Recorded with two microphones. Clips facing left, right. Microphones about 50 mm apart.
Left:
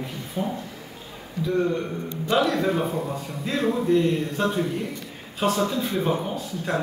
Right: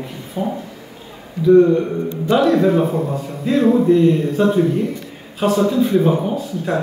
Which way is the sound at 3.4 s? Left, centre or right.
Centre.